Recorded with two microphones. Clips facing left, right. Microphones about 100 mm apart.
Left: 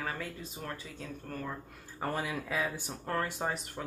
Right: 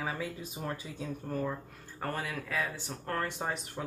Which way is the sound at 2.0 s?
15° left (ahead or behind).